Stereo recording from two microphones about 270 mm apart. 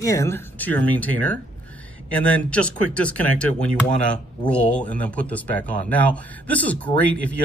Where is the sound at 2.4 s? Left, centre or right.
Centre.